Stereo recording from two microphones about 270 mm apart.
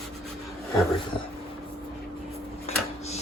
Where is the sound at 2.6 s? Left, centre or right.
Left.